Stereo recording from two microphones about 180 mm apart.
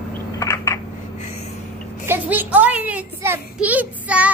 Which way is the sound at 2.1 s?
10° right (ahead or behind).